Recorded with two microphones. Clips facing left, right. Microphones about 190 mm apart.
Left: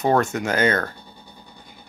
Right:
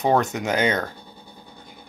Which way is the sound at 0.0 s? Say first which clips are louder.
Left 1 dB; 15° right (ahead or behind).